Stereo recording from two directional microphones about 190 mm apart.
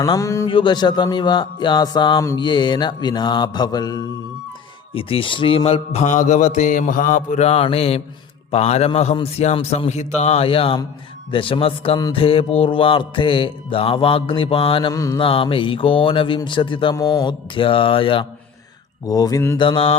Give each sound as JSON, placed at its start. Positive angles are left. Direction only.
{"t": 0.0, "sound": "speech", "side_deg": 15}
{"t": 15.3, "sound": "speech", "side_deg": 30}
{"t": 19.5, "sound": "speech", "side_deg": 25}